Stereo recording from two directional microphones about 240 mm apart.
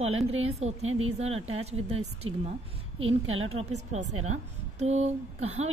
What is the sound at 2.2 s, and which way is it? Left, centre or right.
A woman's voice, right.